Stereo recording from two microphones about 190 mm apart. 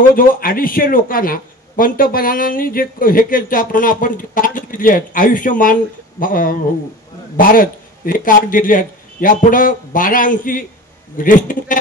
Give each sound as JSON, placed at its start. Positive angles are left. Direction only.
{"t": 0.1, "sound": "speech", "side_deg": 50}